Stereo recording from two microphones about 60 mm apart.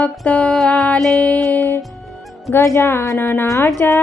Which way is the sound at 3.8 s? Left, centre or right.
Left.